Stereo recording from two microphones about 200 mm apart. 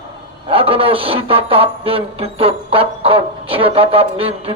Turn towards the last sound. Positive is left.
turn(degrees=-30)  # may be behind; listen again after turning